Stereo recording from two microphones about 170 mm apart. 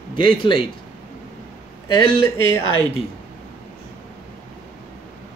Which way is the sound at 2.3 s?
30° right (ahead or behind).